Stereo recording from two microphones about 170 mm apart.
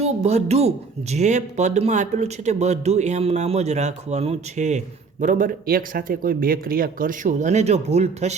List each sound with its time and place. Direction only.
0.0 s speech: 40° right (ahead or behind)